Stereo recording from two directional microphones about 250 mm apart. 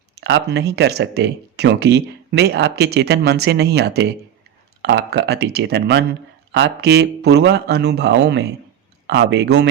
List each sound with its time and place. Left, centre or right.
0.2 s speech: right